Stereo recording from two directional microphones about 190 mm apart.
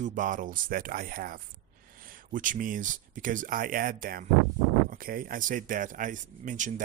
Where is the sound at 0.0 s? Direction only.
45° right (ahead or behind).